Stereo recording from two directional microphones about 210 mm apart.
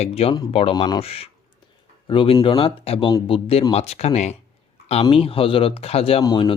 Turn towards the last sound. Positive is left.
turn(degrees=20)  # may be behind; listen again after turning